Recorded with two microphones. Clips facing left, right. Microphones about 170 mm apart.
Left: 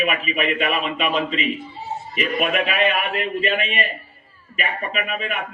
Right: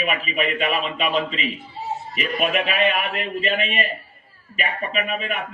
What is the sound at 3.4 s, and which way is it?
A man's voice, 35° right (ahead or behind).